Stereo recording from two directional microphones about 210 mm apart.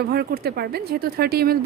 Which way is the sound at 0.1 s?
50° right (ahead or behind).